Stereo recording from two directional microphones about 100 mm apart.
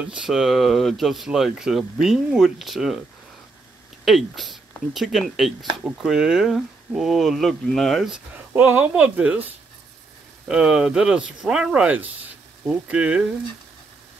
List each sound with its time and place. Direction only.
0.0 s speech: 10° right (ahead or behind)
4.0 s speech: centre (ahead or behind)
8.5 s speech: 20° right (ahead or behind)
10.5 s speech: 10° right (ahead or behind)